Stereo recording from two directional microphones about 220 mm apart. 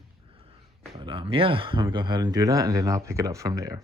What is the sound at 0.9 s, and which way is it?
Speech, 25° right (ahead or behind).